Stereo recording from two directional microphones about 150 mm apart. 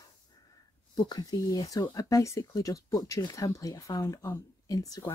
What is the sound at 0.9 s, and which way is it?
Speech, 25° left (ahead or behind).